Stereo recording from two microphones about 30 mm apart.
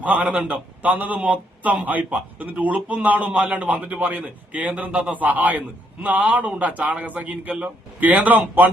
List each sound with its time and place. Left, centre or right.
0.0 s a man's voice: right
4.9 s a man's voice: right
5.1 s a man's voice: right
7.0 s a man's voice: right